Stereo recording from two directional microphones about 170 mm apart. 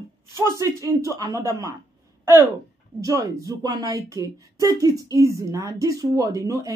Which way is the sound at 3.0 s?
20° right (ahead or behind).